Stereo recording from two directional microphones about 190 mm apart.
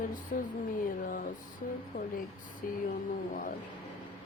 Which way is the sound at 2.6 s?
45° left (ahead or behind).